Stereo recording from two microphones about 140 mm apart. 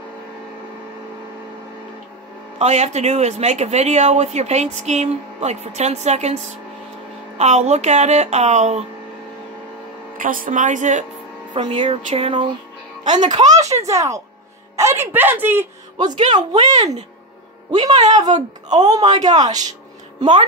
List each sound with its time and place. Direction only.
2.6 s speech: 55° right (ahead or behind)
7.3 s speech: 50° right (ahead or behind)
10.1 s a woman's voice: 75° right (ahead or behind)
11.5 s speech: 35° right (ahead or behind)
11.8 s speech: 50° right (ahead or behind); by 13.4 s 35° right (ahead or behind)
13.4 s a woman's voice: 55° right (ahead or behind)
13.8 s a woman's voice: 20° right (ahead or behind)
16.3 s speech: 30° right (ahead or behind)